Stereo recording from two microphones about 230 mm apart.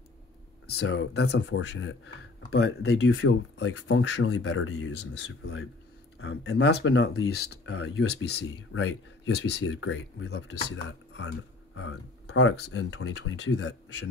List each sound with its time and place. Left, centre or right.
0.7 s speech: left